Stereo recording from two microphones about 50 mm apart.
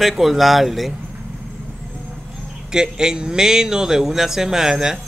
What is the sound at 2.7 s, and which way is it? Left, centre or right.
A man's voice, centre.